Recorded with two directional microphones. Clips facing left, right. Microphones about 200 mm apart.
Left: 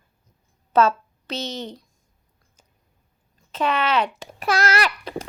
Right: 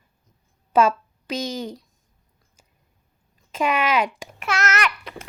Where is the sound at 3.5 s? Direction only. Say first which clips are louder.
Even; 10° right (ahead or behind).